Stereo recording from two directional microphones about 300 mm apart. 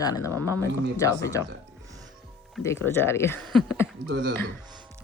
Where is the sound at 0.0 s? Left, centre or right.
Centre.